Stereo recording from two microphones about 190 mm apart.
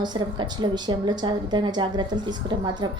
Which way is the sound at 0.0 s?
20° right (ahead or behind).